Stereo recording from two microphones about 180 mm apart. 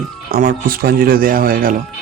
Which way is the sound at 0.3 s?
55° right (ahead or behind).